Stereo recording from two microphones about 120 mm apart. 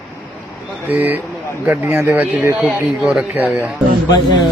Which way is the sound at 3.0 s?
5° right (ahead or behind).